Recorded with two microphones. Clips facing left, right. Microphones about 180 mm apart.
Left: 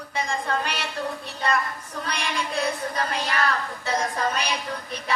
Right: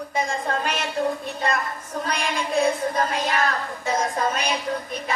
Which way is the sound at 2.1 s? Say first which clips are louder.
Right 3 dB; 45° right (ahead or behind).